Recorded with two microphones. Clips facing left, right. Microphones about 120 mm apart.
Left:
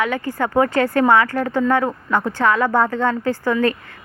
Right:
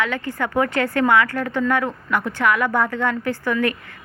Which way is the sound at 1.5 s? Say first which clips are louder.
Left 3 dB; 25° left (ahead or behind).